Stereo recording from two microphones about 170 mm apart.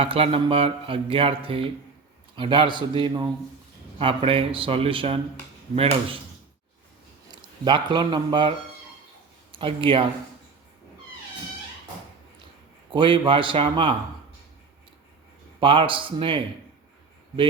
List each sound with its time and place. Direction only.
0.0 s a man's voice: 35° right (ahead or behind)
7.3 s speech: 25° right (ahead or behind)
12.9 s a man's voice: 30° right (ahead or behind)
15.6 s speech: 30° right (ahead or behind)